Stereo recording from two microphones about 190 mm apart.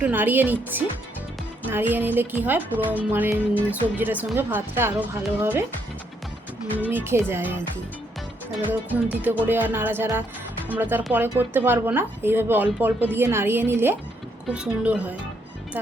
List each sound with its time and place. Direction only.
0.0 s speech: 10° right (ahead or behind)
6.9 s speech: 15° right (ahead or behind)
8.9 s a woman's voice: 10° right (ahead or behind)